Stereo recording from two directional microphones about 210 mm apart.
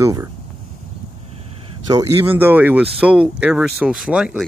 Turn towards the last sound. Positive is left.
turn(degrees=-5)  # may be behind; listen again after turning